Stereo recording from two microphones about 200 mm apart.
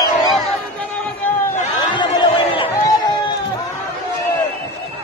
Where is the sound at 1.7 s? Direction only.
20° left (ahead or behind).